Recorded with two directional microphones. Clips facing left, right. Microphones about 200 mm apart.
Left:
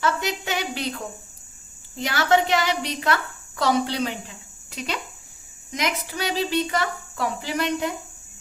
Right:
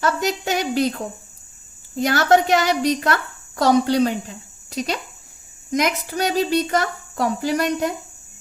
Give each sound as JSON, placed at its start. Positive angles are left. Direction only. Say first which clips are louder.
{"t": 0.0, "sound": "a woman's voice", "louder": "right 4 dB", "side_deg": -45}